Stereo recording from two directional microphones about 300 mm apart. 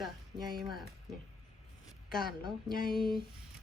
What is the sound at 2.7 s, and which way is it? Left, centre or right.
Speech, left.